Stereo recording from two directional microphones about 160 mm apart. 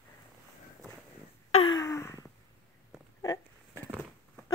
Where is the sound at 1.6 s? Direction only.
25° left (ahead or behind).